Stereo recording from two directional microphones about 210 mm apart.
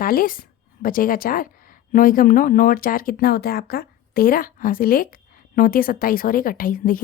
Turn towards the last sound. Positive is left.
turn(degrees=40)  # may be behind; listen again after turning